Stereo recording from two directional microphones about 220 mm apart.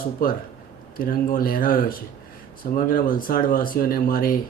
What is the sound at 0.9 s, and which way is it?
Speech, 40° left (ahead or behind).